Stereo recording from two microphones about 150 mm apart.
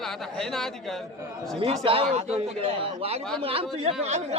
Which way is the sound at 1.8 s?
35° right (ahead or behind).